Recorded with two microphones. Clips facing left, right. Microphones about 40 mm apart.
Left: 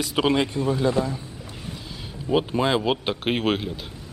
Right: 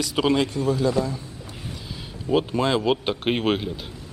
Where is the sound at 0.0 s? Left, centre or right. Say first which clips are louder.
Even; centre.